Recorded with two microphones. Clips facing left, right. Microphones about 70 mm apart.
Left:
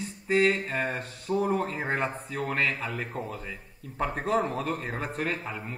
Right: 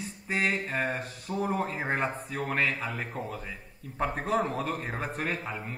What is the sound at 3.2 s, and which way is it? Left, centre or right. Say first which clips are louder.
Speech: even; centre.